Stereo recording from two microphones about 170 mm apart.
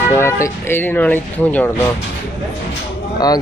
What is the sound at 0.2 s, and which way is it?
Speech, 15° left (ahead or behind).